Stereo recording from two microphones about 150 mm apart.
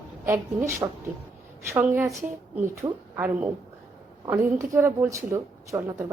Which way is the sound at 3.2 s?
10° right (ahead or behind).